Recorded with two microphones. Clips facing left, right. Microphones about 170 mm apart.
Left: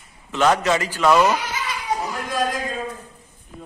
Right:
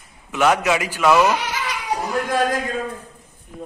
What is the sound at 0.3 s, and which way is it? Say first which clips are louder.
A man's voice: even; 10° right (ahead or behind).